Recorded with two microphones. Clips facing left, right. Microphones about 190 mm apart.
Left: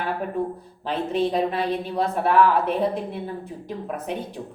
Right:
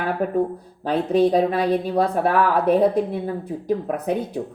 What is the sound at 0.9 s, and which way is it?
Speech, 40° right (ahead or behind).